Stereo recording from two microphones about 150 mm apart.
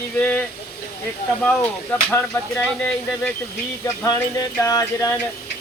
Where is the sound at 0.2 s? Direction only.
10° left (ahead or behind).